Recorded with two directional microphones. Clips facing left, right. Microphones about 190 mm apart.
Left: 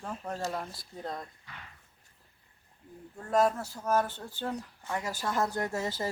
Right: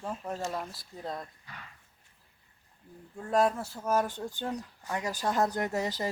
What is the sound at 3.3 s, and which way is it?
Speech, centre (ahead or behind).